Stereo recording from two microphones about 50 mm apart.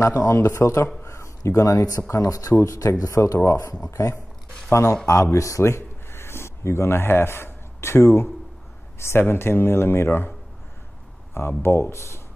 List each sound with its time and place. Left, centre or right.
0.0 s speech: left
4.6 s speech: left
5.0 s speech: left
11.3 s speech: left